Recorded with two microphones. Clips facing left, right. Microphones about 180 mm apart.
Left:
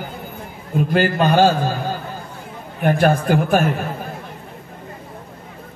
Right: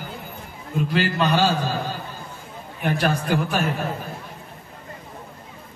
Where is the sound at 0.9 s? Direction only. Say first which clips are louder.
Left 5 dB; 50° left (ahead or behind).